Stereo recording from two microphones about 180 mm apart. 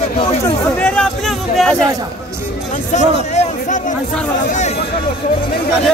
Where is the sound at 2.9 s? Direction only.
40° left (ahead or behind).